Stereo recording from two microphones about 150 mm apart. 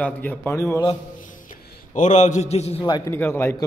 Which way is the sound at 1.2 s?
60° left (ahead or behind).